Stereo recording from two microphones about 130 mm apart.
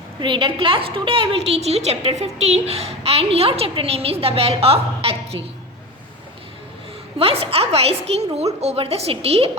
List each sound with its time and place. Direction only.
0.2 s a woman's voice: 35° right (ahead or behind)
7.2 s a woman's voice: 50° right (ahead or behind)